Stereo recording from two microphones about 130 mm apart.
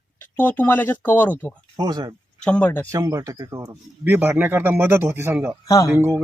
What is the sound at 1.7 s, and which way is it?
Speech, 30° right (ahead or behind).